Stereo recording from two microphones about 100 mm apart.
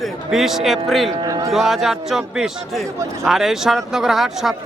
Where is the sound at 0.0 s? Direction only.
5° right (ahead or behind).